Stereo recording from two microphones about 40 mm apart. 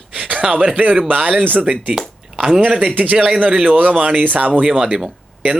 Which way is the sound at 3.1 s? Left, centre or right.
Right.